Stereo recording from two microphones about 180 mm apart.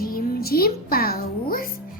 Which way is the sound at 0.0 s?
55° left (ahead or behind).